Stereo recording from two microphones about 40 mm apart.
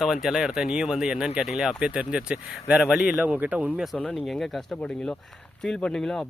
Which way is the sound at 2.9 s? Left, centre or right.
Right.